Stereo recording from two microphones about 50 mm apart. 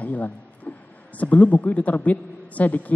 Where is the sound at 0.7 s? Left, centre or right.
Left.